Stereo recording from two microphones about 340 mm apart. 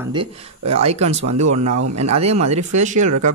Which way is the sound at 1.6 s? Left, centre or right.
Right.